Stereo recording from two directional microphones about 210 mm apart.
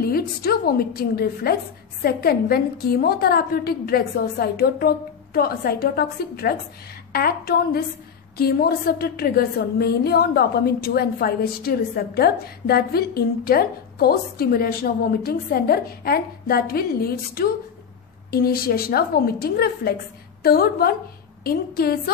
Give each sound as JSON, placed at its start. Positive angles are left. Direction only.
{"t": 0.0, "sound": "a woman's voice", "side_deg": 45}